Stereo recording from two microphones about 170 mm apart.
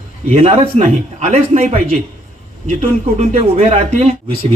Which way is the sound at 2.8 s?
40° right (ahead or behind).